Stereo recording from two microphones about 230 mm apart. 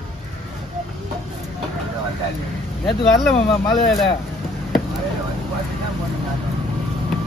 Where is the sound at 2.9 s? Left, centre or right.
Centre.